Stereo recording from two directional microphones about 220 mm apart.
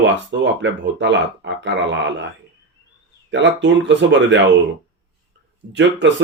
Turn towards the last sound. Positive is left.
turn(degrees=-55)  # may be behind; listen again after turning